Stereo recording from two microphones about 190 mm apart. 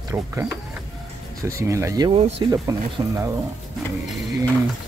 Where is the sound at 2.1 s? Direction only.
30° right (ahead or behind).